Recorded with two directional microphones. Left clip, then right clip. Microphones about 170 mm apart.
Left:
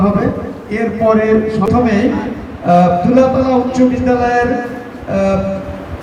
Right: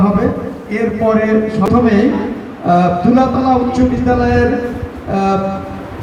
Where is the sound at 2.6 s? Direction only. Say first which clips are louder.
Left 2 dB; centre (ahead or behind).